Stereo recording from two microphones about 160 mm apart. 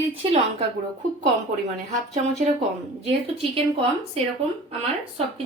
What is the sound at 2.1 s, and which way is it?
A woman's voice, 45° right (ahead or behind).